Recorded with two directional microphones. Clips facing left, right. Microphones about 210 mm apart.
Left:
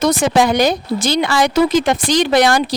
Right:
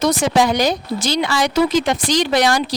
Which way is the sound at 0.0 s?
55° left (ahead or behind).